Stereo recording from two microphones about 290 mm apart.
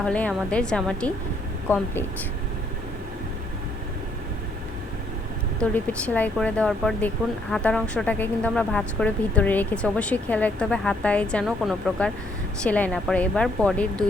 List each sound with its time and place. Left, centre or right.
0.0 s speech: centre
5.7 s speech: centre